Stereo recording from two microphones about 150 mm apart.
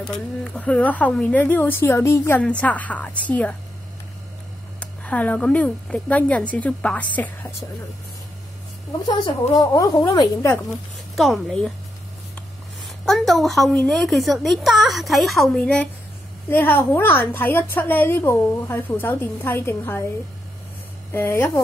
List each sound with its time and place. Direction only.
0.0 s speech: 5° left (ahead or behind)
4.7 s speech: 10° left (ahead or behind)
9.6 s a woman's voice: 25° left (ahead or behind)
11.1 s a woman's voice: centre (ahead or behind)
13.0 s a woman's voice: centre (ahead or behind)
21.1 s speech: 15° left (ahead or behind)